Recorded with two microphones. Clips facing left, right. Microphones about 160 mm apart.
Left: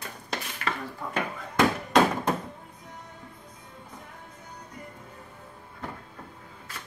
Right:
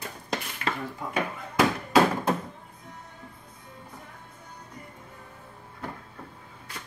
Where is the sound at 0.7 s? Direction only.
30° right (ahead or behind).